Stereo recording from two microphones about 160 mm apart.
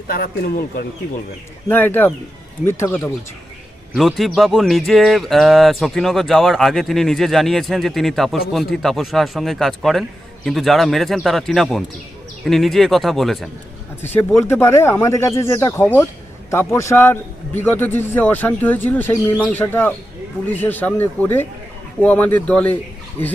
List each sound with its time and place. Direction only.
0.1 s speech: 70° left (ahead or behind)
1.6 s a man's voice: 10° left (ahead or behind)
3.9 s speech: centre (ahead or behind)
14.0 s a man's voice: 10° left (ahead or behind)